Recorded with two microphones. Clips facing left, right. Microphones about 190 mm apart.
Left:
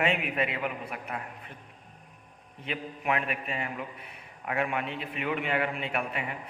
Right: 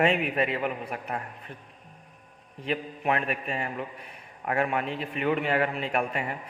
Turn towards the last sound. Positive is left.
turn(degrees=-40)  # may be behind; listen again after turning